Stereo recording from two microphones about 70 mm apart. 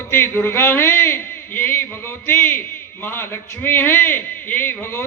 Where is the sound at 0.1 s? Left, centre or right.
Left.